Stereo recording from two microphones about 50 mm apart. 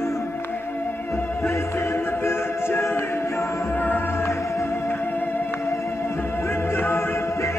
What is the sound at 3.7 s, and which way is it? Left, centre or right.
Music, left.